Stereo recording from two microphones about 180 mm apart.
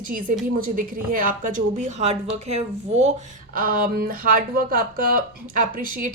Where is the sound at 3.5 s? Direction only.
50° right (ahead or behind).